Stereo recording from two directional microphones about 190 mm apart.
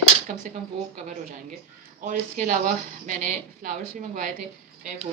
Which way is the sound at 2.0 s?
40° right (ahead or behind).